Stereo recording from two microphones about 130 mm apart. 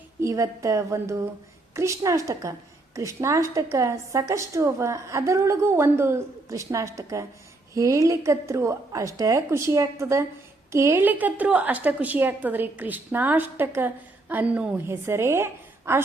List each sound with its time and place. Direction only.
0.2 s a woman's voice: 25° right (ahead or behind)